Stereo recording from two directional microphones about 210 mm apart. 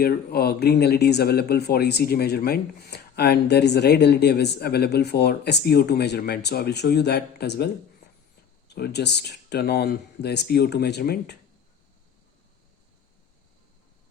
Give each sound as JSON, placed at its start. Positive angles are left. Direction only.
{"t": 0.0, "sound": "speech", "side_deg": 50}
{"t": 8.7, "sound": "speech", "side_deg": 50}